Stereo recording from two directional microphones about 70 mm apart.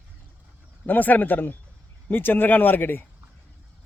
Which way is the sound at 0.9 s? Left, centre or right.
Left.